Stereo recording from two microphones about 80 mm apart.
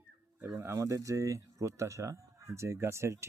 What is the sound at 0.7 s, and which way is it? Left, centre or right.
Speech, right.